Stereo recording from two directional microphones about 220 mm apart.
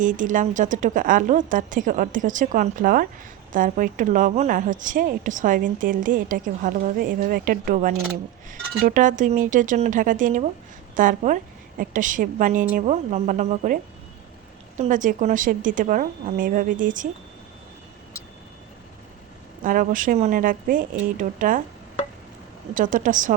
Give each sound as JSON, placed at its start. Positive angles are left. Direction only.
{"t": 0.0, "sound": "speech", "side_deg": -35}
{"t": 14.8, "sound": "speech", "side_deg": -35}
{"t": 19.6, "sound": "speech", "side_deg": -40}
{"t": 22.7, "sound": "speech", "side_deg": -35}